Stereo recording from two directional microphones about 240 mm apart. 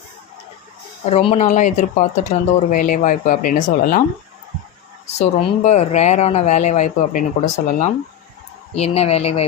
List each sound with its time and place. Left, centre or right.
1.1 s speech: left
5.0 s speech: left